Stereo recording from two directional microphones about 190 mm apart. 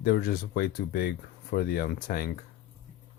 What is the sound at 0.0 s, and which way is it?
Speech, 55° left (ahead or behind).